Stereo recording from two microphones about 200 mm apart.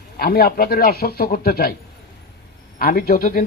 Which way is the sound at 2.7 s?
50° left (ahead or behind).